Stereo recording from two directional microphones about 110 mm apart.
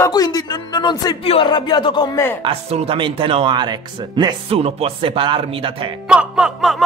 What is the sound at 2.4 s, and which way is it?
Speech, 65° right (ahead or behind).